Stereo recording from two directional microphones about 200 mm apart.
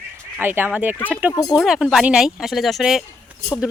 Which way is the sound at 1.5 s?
Centre (ahead or behind).